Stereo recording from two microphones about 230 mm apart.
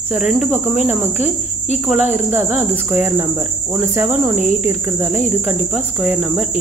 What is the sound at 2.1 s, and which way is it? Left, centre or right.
Cricket, centre.